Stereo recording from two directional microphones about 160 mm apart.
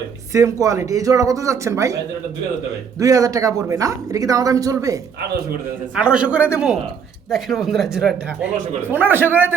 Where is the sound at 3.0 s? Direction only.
20° right (ahead or behind).